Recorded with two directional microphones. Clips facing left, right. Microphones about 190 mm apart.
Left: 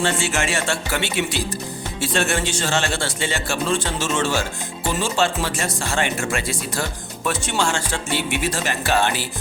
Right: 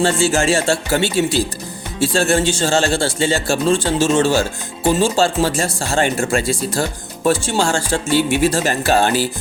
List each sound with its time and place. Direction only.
0.0 s a man's voice: 30° right (ahead or behind)